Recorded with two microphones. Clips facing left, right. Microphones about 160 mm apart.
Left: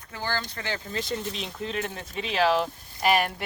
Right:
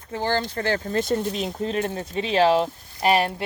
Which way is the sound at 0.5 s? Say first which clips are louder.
Right 8 dB; 40° right (ahead or behind).